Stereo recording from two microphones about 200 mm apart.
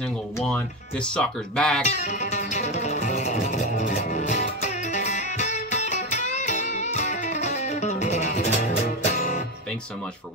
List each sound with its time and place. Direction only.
1.1 s speech: 5° left (ahead or behind)
1.8 s music: 35° left (ahead or behind)